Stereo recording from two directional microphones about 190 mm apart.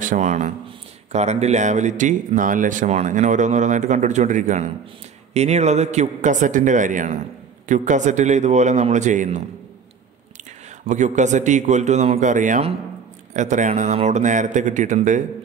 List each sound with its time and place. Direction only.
0.0 s speech: 40° right (ahead or behind)
10.9 s speech: 40° right (ahead or behind)